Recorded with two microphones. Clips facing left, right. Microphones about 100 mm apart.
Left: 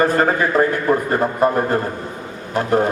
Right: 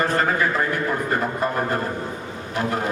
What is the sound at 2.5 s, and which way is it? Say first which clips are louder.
Speech: left 7 dB; 40° left (ahead or behind).